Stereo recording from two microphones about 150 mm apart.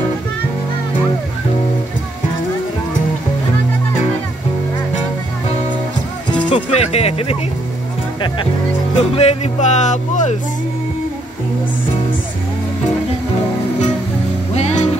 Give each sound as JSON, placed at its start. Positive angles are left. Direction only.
{"t": 6.5, "sound": "music", "side_deg": 45}
{"t": 9.1, "sound": "speech", "side_deg": 45}
{"t": 14.5, "sound": "music", "side_deg": 45}